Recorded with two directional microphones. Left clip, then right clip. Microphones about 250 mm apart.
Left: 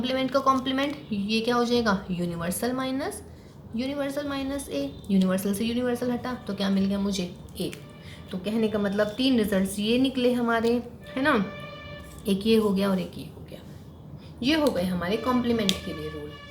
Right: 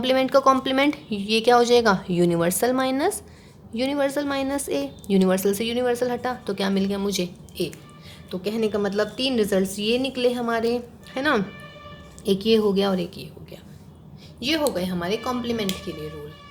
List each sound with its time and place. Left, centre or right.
0.0 s a woman's voice: right
14.4 s a woman's voice: right